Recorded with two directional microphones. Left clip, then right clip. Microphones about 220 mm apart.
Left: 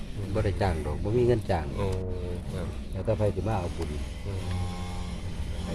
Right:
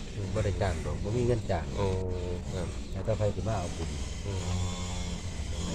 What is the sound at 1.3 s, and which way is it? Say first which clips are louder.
Speech: left 4 dB; 45° left (ahead or behind).